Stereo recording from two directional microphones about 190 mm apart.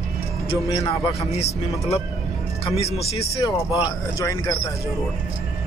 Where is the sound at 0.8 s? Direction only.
30° left (ahead or behind).